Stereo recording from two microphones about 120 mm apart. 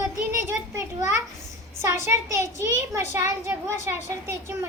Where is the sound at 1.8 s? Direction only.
25° right (ahead or behind).